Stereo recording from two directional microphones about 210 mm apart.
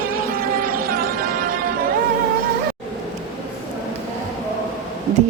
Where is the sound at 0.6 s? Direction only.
45° right (ahead or behind).